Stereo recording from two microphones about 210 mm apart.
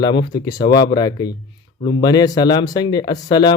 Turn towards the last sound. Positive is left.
turn(degrees=20)  # may be behind; listen again after turning